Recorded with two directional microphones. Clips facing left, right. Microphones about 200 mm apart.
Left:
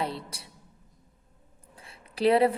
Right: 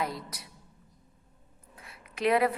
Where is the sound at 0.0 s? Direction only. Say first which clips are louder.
Left 1 dB; 30° left (ahead or behind).